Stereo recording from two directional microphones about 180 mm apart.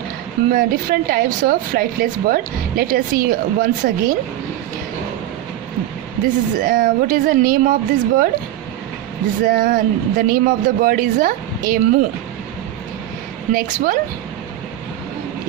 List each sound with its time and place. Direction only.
0.5 s speech: 55° right (ahead or behind)
6.2 s speech: 50° right (ahead or behind)
9.4 s speech: 50° right (ahead or behind)
13.5 s speech: 50° right (ahead or behind)